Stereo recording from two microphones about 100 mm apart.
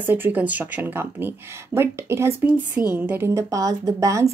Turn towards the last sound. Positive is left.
turn(degrees=-35)  # may be behind; listen again after turning